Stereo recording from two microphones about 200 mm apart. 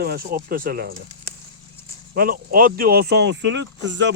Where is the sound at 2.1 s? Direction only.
50° right (ahead or behind); by 4.1 s 65° right (ahead or behind).